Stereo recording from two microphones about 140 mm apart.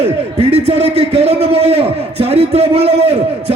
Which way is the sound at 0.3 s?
45° right (ahead or behind).